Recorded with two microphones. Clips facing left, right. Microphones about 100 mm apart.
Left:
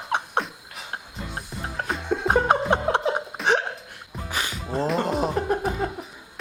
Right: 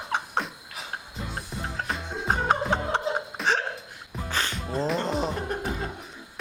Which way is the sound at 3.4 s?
Centre (ahead or behind).